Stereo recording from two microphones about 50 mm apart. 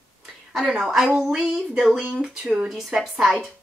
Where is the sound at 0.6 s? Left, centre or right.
Centre.